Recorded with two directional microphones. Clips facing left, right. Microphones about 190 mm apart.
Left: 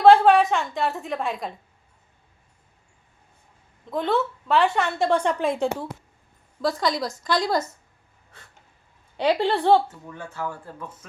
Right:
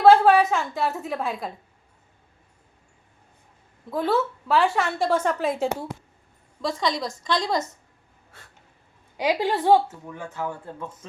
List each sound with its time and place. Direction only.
0.0 s a woman's voice: centre (ahead or behind)
3.8 s a woman's voice: 5° right (ahead or behind)
9.1 s speech: 10° right (ahead or behind)